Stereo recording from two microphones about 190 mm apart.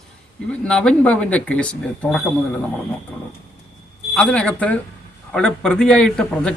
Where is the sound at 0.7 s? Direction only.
5° left (ahead or behind).